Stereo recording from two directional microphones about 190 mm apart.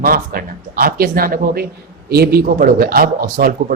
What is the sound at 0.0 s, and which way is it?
Speech, 50° right (ahead or behind).